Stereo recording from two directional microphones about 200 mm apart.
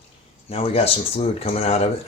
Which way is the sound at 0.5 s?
30° left (ahead or behind).